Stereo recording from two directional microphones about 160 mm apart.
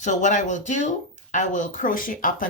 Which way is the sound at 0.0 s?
50° left (ahead or behind).